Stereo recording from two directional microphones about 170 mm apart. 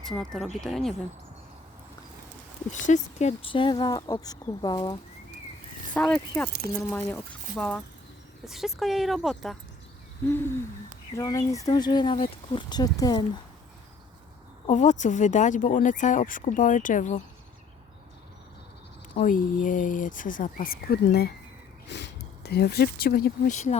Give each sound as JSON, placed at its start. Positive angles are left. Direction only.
{"t": 0.2, "sound": "speech", "side_deg": 0}
{"t": 2.7, "sound": "speech", "side_deg": 45}
{"t": 5.9, "sound": "speech", "side_deg": 5}
{"t": 10.2, "sound": "speech", "side_deg": 15}
{"t": 14.7, "sound": "speech", "side_deg": 45}
{"t": 19.1, "sound": "speech", "side_deg": 55}
{"t": 21.8, "sound": "speech", "side_deg": 90}
{"t": 23.5, "sound": "speech", "side_deg": 45}